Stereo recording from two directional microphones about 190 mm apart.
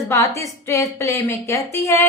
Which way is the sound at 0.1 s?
15° left (ahead or behind).